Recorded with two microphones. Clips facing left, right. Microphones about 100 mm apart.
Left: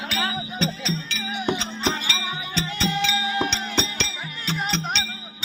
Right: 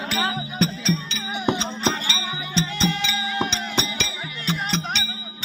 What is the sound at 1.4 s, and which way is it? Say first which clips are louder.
Music: right 2 dB; 20° right (ahead or behind).